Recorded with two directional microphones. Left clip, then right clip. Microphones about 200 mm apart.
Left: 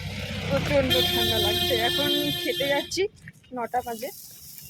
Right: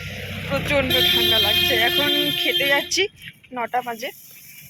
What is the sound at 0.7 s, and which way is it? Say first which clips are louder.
Speech: right 5 dB; 5° right (ahead or behind).